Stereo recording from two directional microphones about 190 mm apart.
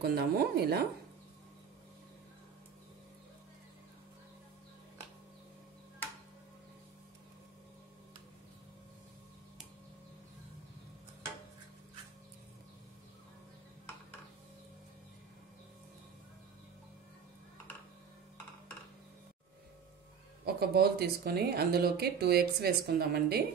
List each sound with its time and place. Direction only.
0.0 s speech: 55° right (ahead or behind)
20.4 s speech: 55° right (ahead or behind)